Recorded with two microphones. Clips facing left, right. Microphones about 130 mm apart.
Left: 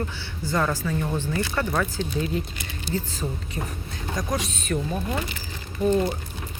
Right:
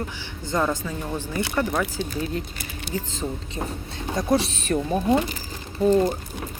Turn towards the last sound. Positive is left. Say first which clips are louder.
# right 3 dB
turn(degrees=-35)  # may be behind; listen again after turning